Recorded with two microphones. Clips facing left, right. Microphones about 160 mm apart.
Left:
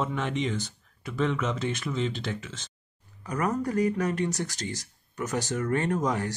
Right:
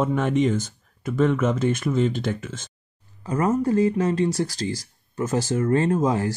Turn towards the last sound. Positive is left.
turn(degrees=-25)  # may be behind; listen again after turning